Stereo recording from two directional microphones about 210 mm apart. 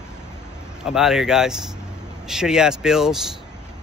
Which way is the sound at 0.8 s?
Centre (ahead or behind).